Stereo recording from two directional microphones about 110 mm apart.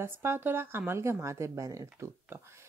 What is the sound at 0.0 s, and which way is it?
Speech, 20° right (ahead or behind).